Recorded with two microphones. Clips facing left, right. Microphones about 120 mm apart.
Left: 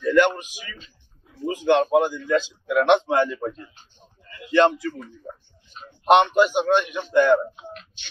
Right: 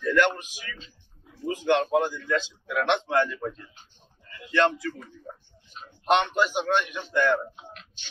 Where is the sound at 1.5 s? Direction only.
10° left (ahead or behind).